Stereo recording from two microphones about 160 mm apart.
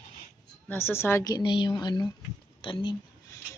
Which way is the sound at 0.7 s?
15° left (ahead or behind).